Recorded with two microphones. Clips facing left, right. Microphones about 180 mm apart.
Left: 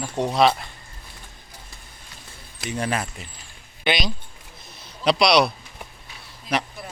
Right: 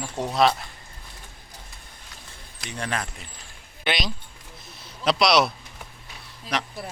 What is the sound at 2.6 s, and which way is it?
Speech, 5° left (ahead or behind).